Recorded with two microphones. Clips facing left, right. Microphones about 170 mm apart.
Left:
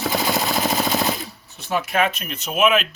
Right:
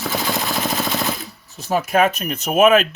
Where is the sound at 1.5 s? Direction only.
40° right (ahead or behind).